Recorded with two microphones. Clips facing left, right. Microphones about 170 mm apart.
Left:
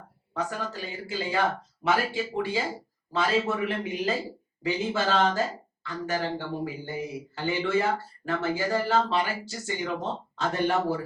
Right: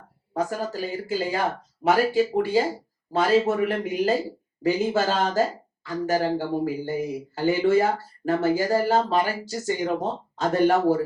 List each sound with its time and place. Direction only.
0.3 s a man's voice: 40° right (ahead or behind)